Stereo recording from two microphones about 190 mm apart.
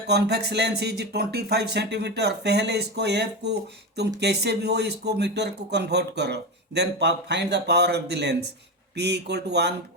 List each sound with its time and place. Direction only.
0.1 s speech: 60° right (ahead or behind)